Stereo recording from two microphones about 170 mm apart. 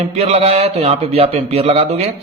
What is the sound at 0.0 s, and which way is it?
A man's voice, 35° right (ahead or behind).